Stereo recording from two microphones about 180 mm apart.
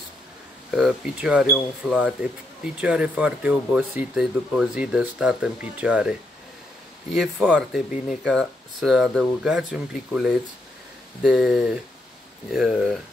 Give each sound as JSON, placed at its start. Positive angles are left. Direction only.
{"t": 0.7, "sound": "speech", "side_deg": -5}